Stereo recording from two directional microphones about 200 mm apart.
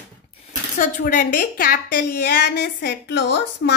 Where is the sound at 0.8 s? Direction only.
45° left (ahead or behind).